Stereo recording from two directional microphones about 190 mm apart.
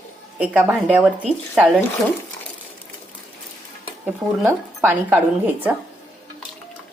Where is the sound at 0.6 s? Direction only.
5° left (ahead or behind).